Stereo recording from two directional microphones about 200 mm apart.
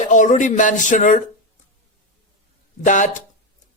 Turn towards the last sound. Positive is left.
turn(degrees=40)  # may be behind; listen again after turning